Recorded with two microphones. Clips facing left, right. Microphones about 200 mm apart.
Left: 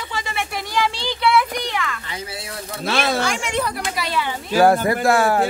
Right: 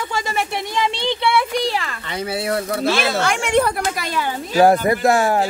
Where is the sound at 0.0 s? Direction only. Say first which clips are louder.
Right 4 dB; 45° right (ahead or behind).